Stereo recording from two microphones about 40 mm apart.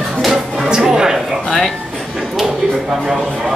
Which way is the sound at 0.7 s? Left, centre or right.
Centre.